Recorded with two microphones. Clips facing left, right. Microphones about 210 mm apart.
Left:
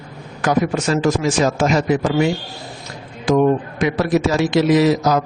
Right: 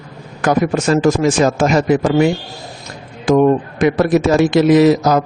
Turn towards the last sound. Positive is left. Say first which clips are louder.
# right 4 dB
turn(degrees=-50)  # may be behind; listen again after turning